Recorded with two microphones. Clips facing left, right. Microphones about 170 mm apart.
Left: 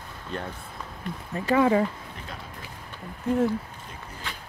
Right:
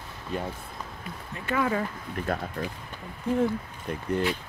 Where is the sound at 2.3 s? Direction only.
55° right (ahead or behind).